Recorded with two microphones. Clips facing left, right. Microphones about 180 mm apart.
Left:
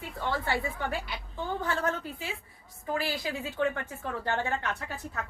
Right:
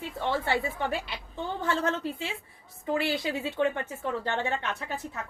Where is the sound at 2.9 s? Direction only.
25° right (ahead or behind).